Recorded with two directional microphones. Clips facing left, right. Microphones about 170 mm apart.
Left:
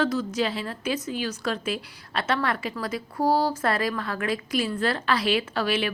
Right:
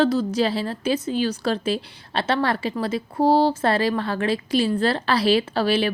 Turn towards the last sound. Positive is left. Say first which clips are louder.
# right 5 dB
turn(degrees=-30)  # may be behind; listen again after turning